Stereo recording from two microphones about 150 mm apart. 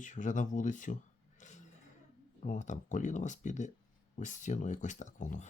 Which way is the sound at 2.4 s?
55° left (ahead or behind).